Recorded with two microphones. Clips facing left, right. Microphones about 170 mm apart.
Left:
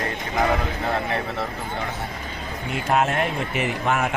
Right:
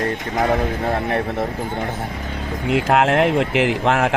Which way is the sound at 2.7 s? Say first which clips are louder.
Right 6 dB; 85° right.